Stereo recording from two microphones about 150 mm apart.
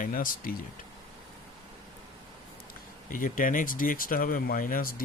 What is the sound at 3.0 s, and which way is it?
Speech, 65° left (ahead or behind).